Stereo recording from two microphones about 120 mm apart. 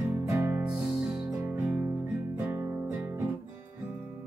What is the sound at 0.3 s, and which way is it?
Music, 20° right (ahead or behind).